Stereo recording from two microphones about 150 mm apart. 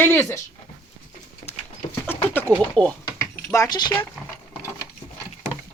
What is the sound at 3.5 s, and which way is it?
Speech, 25° left (ahead or behind).